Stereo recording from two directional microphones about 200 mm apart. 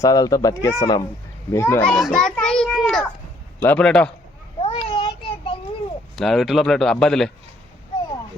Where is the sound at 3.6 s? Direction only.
5° left (ahead or behind).